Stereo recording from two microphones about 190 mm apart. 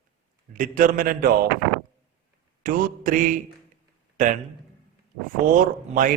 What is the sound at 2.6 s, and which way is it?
A man's voice, 45° right (ahead or behind).